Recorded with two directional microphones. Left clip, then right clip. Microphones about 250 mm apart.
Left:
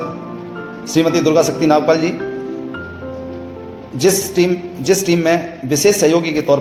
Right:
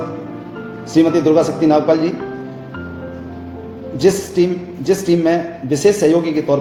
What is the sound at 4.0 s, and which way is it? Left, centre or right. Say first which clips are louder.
A man's voice: even; left.